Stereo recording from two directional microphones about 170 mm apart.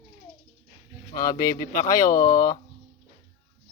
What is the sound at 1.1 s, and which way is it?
Speech, 20° left (ahead or behind).